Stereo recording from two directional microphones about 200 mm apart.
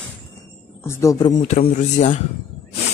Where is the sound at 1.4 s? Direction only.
35° left (ahead or behind).